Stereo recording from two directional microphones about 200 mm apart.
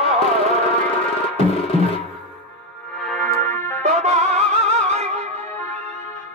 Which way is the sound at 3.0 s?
5° left (ahead or behind).